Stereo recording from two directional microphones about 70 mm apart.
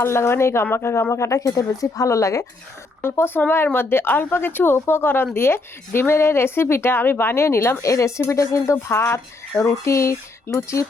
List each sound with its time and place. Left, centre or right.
0.0 s a woman's voice: left
3.0 s a woman's voice: left
7.9 s speech: left